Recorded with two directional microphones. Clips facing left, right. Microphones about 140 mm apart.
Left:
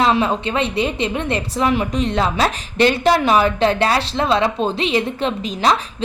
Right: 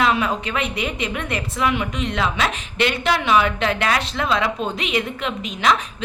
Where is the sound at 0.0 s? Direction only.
30° left (ahead or behind).